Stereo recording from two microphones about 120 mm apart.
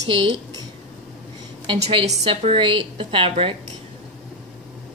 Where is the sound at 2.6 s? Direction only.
45° right (ahead or behind).